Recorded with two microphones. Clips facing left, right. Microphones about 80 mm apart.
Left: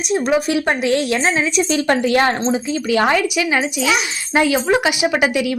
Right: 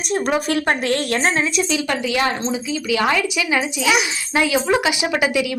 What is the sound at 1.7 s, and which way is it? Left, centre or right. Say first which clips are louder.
Speech: left 5 dB; left.